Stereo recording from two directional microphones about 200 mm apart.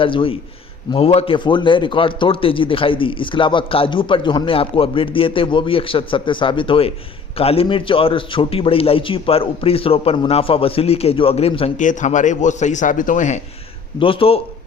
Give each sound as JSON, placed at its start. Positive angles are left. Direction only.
{"t": 0.0, "sound": "a man's voice", "side_deg": 25}
{"t": 14.0, "sound": "a man's voice", "side_deg": 25}